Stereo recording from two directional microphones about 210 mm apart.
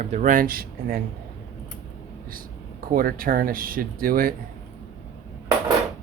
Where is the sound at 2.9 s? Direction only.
45° right (ahead or behind).